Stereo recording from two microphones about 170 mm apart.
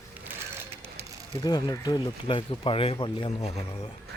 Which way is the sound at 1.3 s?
25° left (ahead or behind).